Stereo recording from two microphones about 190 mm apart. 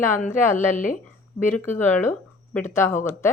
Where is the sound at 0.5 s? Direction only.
40° left (ahead or behind).